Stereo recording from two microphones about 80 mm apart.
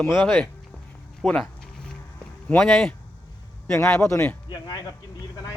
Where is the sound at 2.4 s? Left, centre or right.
Centre.